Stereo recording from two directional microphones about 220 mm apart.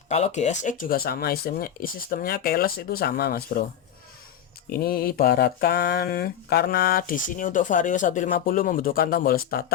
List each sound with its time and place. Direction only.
0.1 s speech: 30° left (ahead or behind)
4.7 s speech: 45° left (ahead or behind)